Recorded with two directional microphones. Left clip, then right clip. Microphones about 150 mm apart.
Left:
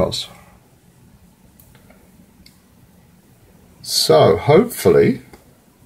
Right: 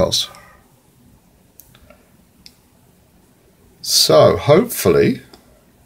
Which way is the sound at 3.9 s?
15° right (ahead or behind).